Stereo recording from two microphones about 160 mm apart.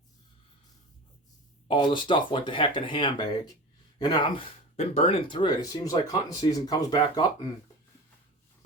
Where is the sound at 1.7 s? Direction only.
30° left (ahead or behind).